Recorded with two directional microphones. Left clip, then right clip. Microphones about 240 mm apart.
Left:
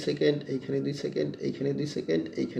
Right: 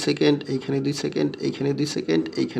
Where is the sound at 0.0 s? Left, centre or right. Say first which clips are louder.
Right 6 dB; right.